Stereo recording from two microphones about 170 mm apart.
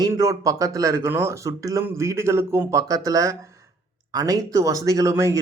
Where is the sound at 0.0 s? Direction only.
20° right (ahead or behind).